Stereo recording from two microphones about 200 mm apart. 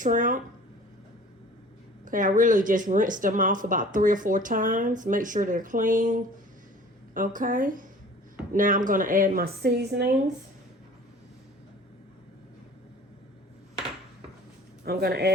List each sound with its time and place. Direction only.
0.0 s speech: 40° right (ahead or behind)
2.0 s a woman's voice: 40° right (ahead or behind)
14.8 s a woman's voice: 50° right (ahead or behind)